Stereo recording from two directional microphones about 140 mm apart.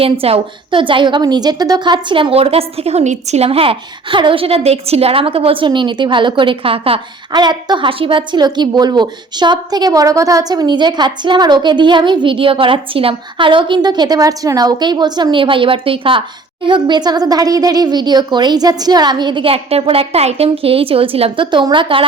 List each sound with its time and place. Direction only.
0.0 s a woman's voice: 45° right (ahead or behind)